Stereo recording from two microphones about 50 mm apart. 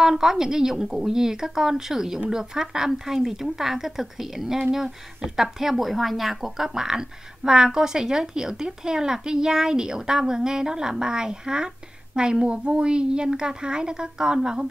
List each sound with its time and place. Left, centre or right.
0.0 s speech: centre